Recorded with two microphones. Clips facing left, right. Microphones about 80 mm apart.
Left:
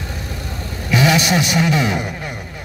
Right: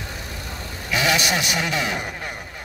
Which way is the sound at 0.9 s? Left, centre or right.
Left.